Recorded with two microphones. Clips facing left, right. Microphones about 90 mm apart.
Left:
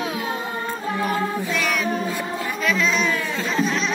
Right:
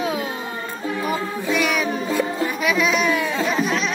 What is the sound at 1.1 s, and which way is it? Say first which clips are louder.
Music: right 2 dB; 5° right (ahead or behind).